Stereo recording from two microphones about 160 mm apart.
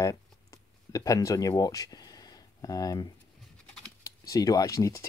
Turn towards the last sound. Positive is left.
turn(degrees=20)  # may be behind; listen again after turning